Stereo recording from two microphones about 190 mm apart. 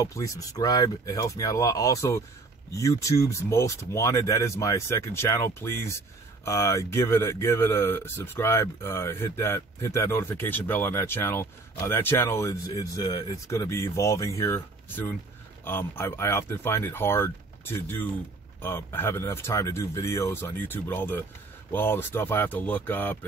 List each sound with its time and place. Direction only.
0.0 s speech: 15° left (ahead or behind)